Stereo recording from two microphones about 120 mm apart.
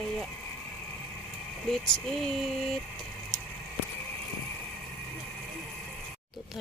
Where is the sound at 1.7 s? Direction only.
5° left (ahead or behind).